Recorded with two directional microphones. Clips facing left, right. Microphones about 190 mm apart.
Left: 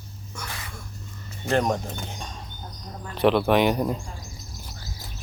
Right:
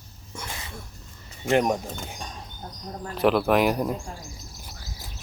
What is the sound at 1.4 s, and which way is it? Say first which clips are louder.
Speech: right 1 dB; 15° right (ahead or behind).